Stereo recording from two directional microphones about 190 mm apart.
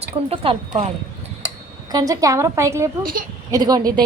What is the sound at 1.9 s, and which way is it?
A woman's voice, 20° right (ahead or behind).